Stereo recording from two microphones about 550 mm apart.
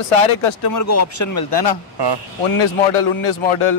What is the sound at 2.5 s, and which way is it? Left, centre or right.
Speech, left.